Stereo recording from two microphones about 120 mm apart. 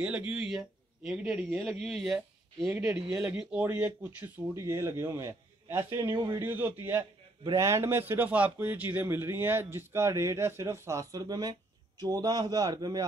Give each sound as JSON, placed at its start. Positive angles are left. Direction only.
{"t": 0.0, "sound": "a man's voice", "side_deg": -10}
{"t": 6.1, "sound": "a man's voice", "side_deg": -40}
{"t": 6.4, "sound": "a man's voice", "side_deg": -15}